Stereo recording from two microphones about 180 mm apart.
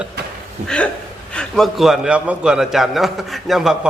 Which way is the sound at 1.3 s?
5° left (ahead or behind).